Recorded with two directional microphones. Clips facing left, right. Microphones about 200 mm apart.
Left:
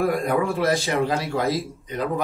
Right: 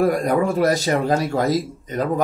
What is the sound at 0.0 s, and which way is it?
Speech, 40° right (ahead or behind).